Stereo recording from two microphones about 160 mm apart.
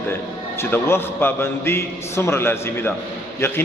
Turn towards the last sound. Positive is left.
turn(degrees=15)  # may be behind; listen again after turning